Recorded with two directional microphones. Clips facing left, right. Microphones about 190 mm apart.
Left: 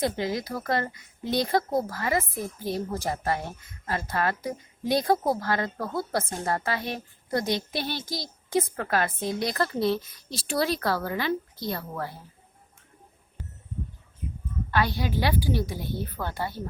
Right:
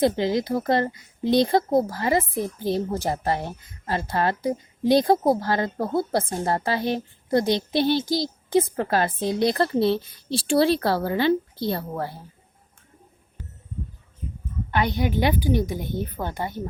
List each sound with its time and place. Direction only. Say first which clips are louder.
0.0 s a woman's voice: right 6 dB; 25° right (ahead or behind)
14.7 s a woman's voice: right 3 dB; 20° right (ahead or behind)